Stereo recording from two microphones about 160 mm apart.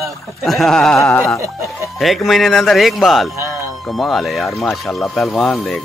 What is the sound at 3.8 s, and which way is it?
Speech, centre (ahead or behind).